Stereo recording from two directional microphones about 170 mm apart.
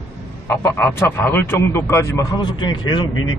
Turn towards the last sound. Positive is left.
turn(degrees=25)  # may be behind; listen again after turning